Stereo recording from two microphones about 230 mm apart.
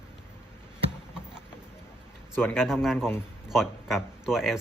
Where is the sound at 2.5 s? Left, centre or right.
Centre.